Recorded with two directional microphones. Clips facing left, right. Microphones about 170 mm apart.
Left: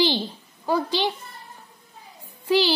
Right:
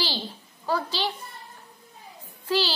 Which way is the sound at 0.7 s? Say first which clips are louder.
Left 4 dB; 15° left (ahead or behind).